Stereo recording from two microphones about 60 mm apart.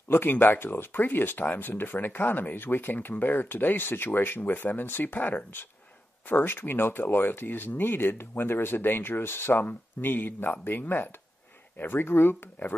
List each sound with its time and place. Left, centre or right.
0.1 s speech: left